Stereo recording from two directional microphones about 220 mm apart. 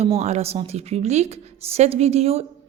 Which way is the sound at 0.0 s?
30° right (ahead or behind).